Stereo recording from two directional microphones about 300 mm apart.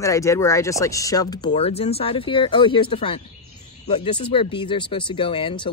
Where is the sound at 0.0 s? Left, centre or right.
Centre.